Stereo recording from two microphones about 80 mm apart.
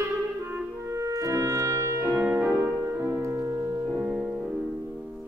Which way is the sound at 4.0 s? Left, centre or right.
Centre.